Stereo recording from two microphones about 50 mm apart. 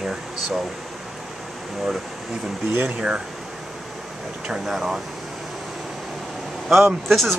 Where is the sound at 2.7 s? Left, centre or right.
Right.